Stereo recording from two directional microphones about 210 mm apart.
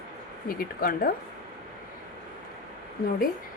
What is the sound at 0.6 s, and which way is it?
Speech, 45° left (ahead or behind).